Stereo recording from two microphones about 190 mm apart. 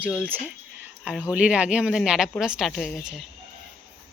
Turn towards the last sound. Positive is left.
turn(degrees=0)  # may be behind; listen again after turning